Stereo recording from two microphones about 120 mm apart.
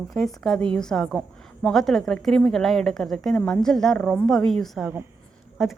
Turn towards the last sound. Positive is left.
turn(degrees=-5)  # may be behind; listen again after turning